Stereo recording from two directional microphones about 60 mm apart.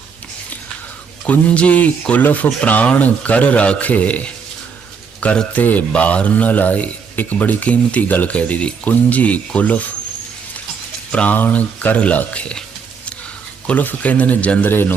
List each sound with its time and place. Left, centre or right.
1.3 s speech: left
5.5 s speech: left
11.1 s speech: centre
13.7 s speech: left
14.7 s speech: left